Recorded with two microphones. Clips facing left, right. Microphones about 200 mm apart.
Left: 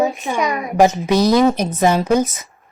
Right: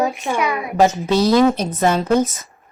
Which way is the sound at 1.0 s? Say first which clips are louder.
Even; 15° left (ahead or behind).